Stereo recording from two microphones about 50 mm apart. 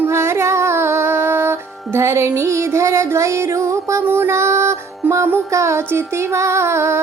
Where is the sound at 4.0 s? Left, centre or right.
Right.